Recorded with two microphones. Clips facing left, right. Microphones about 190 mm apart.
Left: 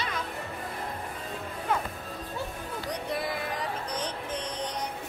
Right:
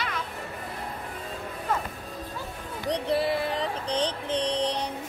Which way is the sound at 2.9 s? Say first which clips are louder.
Right 8 dB; 30° right (ahead or behind).